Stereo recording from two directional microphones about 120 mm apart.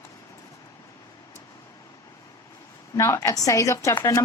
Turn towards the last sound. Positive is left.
turn(degrees=25)  # may be behind; listen again after turning